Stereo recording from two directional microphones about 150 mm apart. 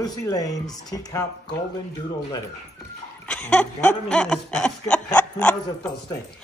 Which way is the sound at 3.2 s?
5° left (ahead or behind).